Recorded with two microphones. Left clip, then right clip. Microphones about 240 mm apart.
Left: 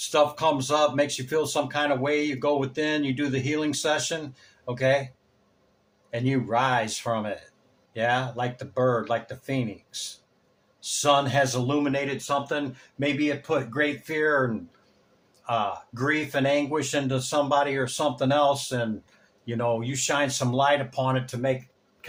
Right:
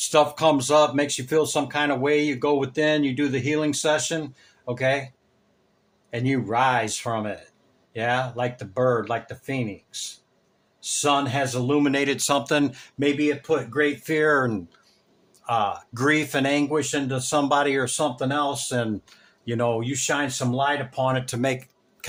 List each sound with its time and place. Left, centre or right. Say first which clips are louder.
0.0 s speech: right 3 dB; right
6.1 s a man's voice: right 1 dB; right
11.8 s speech: right 5 dB; right
13.0 s speech: right 3 dB; right
15.4 s speech: right 3 dB; right